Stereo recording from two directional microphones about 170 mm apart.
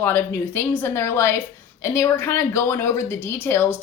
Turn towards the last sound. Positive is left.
turn(degrees=10)  # may be behind; listen again after turning